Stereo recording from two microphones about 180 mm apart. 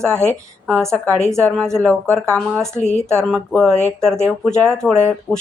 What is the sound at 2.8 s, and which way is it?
Speech, 40° left (ahead or behind).